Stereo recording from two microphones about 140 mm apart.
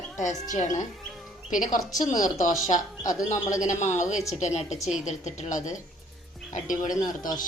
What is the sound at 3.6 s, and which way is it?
A woman's voice, 60° left (ahead or behind).